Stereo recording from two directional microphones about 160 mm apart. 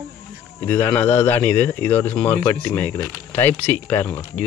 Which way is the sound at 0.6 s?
15° left (ahead or behind).